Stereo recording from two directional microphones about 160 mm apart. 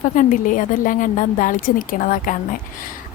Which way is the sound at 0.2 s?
55° left (ahead or behind).